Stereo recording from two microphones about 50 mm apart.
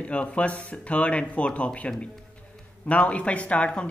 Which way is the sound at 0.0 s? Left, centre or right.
Left.